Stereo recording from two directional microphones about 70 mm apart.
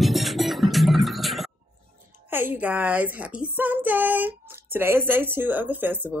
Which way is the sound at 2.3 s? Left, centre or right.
Right.